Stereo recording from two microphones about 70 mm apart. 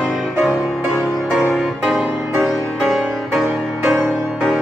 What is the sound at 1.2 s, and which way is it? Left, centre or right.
Music, centre.